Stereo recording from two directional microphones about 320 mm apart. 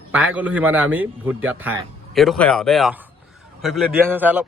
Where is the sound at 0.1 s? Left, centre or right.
Centre.